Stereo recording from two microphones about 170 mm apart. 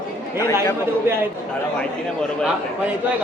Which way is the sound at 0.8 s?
15° right (ahead or behind).